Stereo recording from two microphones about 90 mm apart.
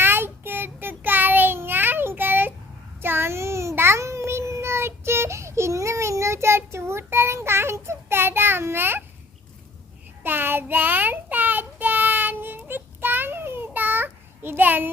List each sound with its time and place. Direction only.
0.0 s child singing: 25° right (ahead or behind)
10.2 s child singing: 25° right (ahead or behind)